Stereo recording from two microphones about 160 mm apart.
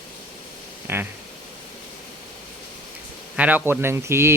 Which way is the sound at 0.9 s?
15° right (ahead or behind).